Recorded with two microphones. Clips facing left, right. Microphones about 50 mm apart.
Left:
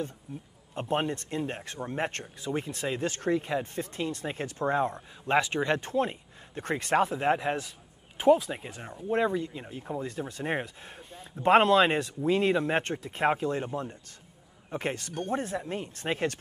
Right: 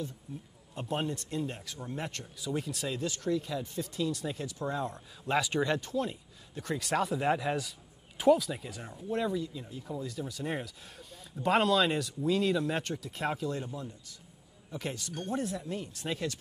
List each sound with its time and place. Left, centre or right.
0.7 s speech: left